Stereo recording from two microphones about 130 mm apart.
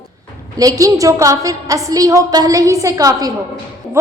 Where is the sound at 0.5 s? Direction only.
30° right (ahead or behind).